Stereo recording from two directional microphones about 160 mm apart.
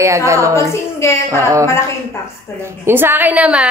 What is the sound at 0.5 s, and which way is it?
Speech, 20° left (ahead or behind).